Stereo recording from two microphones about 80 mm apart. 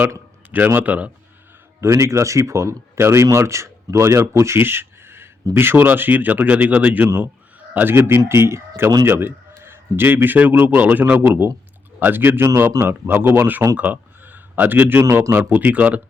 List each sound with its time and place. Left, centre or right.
0.5 s a man's voice: right
1.8 s a man's voice: right
13.7 s a sound: right
15.1 s a man's voice: right